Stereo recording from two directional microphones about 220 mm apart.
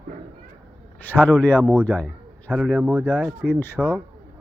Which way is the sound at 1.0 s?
10° left (ahead or behind).